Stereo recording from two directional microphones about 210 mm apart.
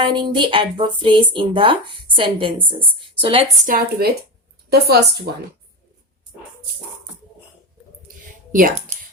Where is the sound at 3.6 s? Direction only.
45° right (ahead or behind).